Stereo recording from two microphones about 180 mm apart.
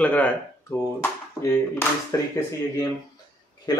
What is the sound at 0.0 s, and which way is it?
Speech, 10° left (ahead or behind).